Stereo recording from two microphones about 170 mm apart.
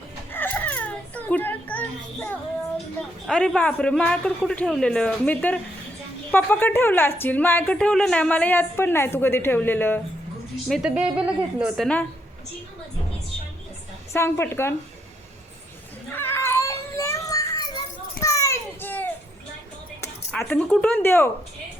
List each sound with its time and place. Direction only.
0.3 s a sound: 10° left (ahead or behind)
3.2 s a woman's voice: 5° left (ahead or behind)
10.7 s speech: 5° right (ahead or behind)
14.1 s a woman's voice: 15° left (ahead or behind)
16.1 s children playing: 15° left (ahead or behind)
20.3 s a woman's voice: 5° left (ahead or behind)